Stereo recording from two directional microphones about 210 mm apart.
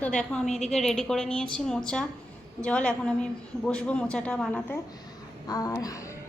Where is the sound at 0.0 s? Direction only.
5° left (ahead or behind).